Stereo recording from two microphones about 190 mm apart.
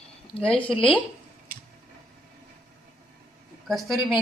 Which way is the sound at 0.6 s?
25° left (ahead or behind).